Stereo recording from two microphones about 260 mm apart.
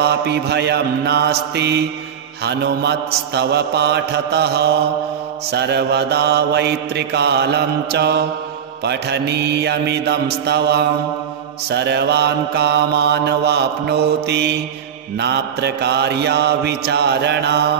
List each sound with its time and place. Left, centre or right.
0.0 s mantra: right